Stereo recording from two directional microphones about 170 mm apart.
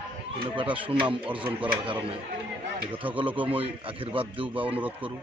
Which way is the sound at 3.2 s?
30° right (ahead or behind).